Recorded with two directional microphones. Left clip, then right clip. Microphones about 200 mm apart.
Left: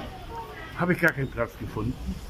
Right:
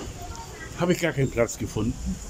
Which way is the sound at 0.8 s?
10° right (ahead or behind).